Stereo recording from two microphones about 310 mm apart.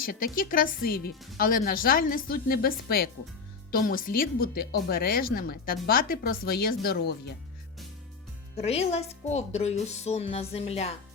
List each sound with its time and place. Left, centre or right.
0.0 s a woman's voice: left
8.5 s speech: centre